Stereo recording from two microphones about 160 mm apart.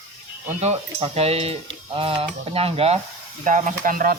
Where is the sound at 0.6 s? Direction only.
40° right (ahead or behind).